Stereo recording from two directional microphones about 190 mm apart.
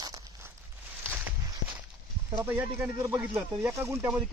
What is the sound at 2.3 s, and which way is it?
Speech, 10° right (ahead or behind).